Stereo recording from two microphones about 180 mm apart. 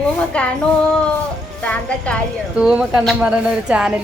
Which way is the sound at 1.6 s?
5° left (ahead or behind).